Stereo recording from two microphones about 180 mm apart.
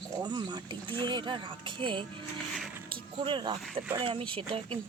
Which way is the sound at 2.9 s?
25° right (ahead or behind).